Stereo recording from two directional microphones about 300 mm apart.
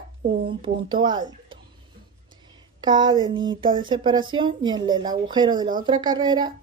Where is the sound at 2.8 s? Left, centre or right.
Centre.